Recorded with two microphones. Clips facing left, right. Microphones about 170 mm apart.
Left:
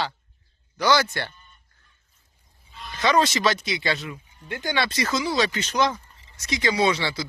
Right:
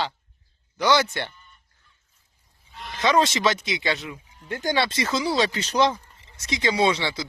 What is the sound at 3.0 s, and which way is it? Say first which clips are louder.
Speech: even; 20° right (ahead or behind).